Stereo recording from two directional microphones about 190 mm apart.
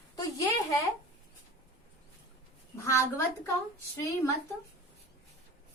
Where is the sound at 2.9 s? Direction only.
15° left (ahead or behind).